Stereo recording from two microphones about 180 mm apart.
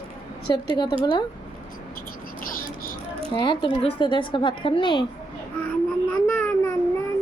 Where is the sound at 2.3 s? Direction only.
50° left (ahead or behind).